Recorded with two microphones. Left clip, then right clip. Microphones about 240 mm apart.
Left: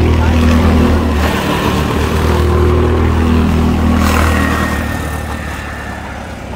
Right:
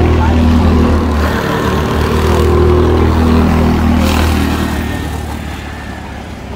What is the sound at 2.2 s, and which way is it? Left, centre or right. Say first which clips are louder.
Vehicle: right 5 dB; right.